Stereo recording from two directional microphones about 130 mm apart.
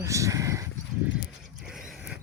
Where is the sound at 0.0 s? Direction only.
25° right (ahead or behind).